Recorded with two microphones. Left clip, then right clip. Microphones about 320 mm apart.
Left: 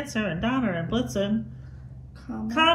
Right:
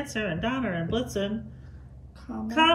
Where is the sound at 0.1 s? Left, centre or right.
Centre.